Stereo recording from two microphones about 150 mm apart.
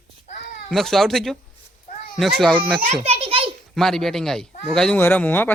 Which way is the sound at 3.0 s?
40° right (ahead or behind).